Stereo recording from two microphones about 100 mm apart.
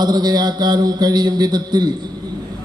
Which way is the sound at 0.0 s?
45° right (ahead or behind).